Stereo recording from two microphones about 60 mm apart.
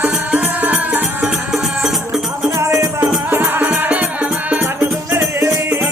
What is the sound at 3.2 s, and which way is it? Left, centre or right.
Music, right.